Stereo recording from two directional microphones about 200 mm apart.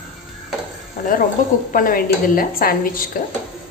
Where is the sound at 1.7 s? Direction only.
45° left (ahead or behind).